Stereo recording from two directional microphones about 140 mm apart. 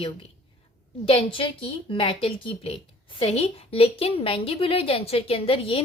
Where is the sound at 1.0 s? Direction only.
40° left (ahead or behind).